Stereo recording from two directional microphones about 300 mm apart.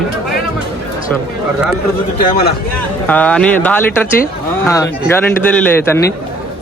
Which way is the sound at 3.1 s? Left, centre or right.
Centre.